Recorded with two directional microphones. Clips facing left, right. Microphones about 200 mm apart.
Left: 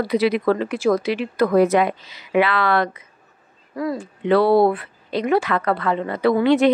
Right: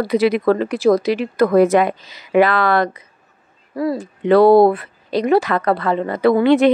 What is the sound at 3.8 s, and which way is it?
Speech, 30° right (ahead or behind).